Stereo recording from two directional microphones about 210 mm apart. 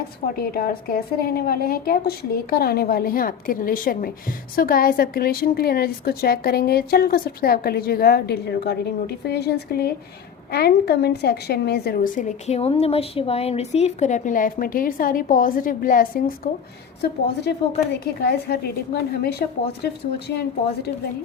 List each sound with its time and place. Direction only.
0.3 s a woman's voice: 45° left (ahead or behind)